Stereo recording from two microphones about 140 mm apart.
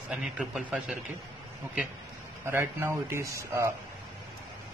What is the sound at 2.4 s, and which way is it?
Speech, 20° right (ahead or behind).